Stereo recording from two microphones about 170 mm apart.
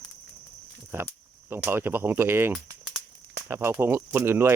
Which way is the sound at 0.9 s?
15° right (ahead or behind).